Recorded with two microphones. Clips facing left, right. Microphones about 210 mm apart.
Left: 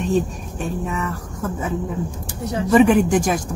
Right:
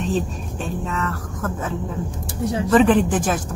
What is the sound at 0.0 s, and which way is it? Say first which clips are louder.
Speech: left 3 dB; 10° left (ahead or behind).